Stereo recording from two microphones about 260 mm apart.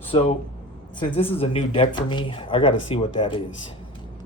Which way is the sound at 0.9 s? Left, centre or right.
Left.